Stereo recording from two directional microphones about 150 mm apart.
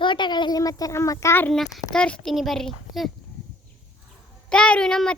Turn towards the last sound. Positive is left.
turn(degrees=5)  # may be behind; listen again after turning